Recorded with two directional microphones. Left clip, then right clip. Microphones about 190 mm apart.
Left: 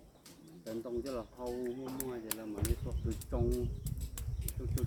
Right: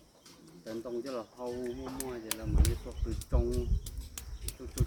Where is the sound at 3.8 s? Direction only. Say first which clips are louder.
Right 2 dB; 5° left (ahead or behind).